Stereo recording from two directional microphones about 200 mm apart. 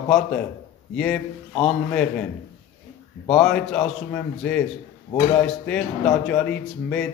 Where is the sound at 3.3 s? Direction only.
Centre (ahead or behind).